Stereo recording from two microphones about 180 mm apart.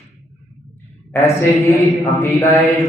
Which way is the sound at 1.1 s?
15° left (ahead or behind).